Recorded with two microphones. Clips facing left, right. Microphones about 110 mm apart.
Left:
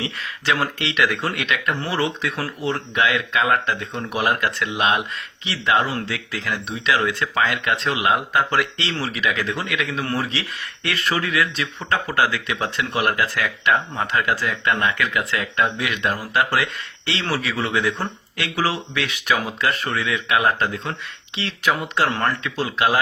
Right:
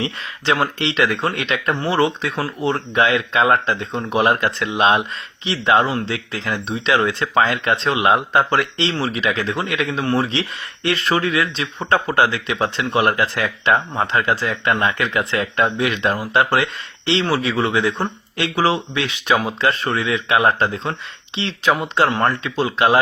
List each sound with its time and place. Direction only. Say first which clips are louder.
0.0 s speech: right 3 dB; 30° right (ahead or behind)